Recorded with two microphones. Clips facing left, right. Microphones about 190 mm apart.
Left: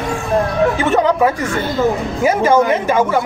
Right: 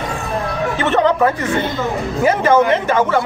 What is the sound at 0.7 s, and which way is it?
Speech, 10° left (ahead or behind).